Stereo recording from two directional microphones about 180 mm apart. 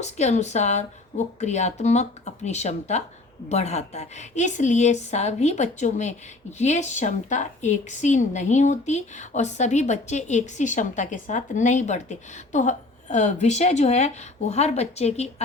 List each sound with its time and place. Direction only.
0.0 s a woman's voice: 40° left (ahead or behind)